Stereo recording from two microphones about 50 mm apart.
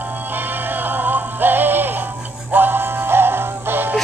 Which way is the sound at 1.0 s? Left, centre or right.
Right.